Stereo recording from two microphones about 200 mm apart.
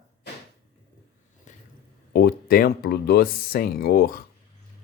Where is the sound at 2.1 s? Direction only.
50° left (ahead or behind).